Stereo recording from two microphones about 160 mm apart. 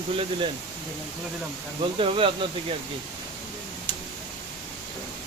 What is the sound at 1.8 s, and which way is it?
Speech, 35° right (ahead or behind).